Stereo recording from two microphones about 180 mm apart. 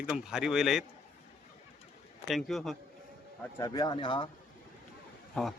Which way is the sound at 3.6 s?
20° left (ahead or behind).